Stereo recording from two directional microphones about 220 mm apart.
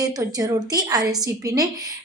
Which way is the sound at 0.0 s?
15° right (ahead or behind).